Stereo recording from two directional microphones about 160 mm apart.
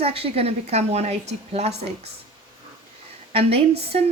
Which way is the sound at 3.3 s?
35° right (ahead or behind).